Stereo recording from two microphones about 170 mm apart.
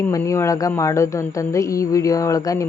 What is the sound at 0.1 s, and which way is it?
Speech, 20° left (ahead or behind).